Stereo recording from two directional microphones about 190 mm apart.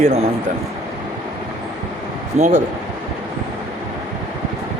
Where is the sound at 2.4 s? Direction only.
40° right (ahead or behind).